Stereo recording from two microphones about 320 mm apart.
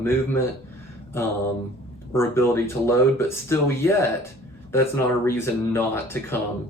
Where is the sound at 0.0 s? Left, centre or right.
Centre.